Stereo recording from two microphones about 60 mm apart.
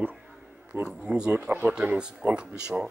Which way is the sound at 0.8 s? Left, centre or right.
Centre.